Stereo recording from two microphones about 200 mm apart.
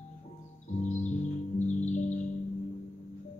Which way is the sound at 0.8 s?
35° left (ahead or behind).